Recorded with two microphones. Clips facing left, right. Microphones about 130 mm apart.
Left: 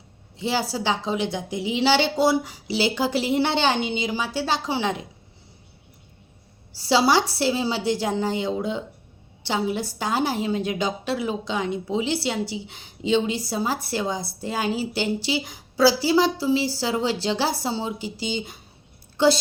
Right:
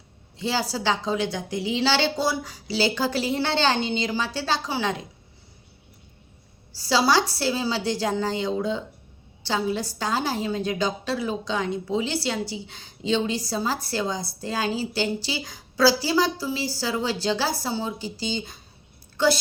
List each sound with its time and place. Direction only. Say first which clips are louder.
0.3 s a woman's voice: left 1 dB; 20° left (ahead or behind)
6.7 s a woman's voice: left 2 dB; 20° left (ahead or behind)